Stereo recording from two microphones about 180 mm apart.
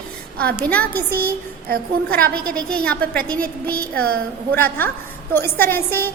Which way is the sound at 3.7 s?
55° right (ahead or behind).